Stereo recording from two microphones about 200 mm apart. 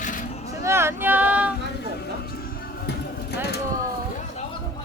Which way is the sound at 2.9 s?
55° left (ahead or behind).